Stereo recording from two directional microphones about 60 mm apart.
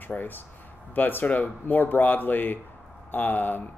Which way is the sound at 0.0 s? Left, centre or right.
Left.